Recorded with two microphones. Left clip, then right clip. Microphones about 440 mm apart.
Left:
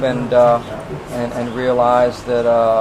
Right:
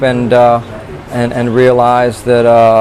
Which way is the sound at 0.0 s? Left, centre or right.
Right.